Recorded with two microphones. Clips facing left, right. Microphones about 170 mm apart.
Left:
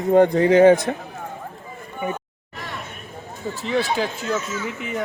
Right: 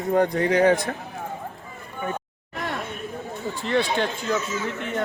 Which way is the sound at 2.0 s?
15° left (ahead or behind).